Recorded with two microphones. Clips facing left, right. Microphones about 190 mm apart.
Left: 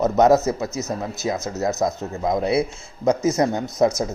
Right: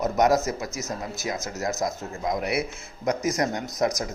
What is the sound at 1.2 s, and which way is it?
Speech, 25° left (ahead or behind).